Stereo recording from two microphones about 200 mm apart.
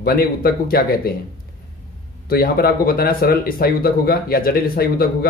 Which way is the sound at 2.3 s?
50° left (ahead or behind).